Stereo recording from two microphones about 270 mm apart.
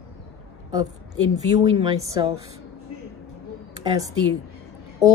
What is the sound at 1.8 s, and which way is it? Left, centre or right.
Speech, centre.